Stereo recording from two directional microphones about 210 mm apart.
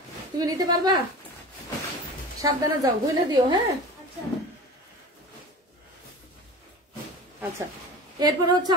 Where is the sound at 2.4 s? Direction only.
15° right (ahead or behind).